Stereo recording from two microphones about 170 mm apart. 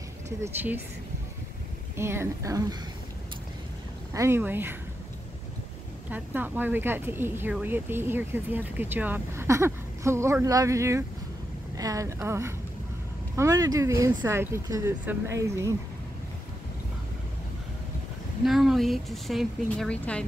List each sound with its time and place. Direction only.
0.4 s speech: 10° right (ahead or behind)
2.0 s speech: 15° right (ahead or behind)
4.1 s speech: 15° right (ahead or behind)
6.0 s speech: 10° right (ahead or behind)
18.4 s speech: centre (ahead or behind)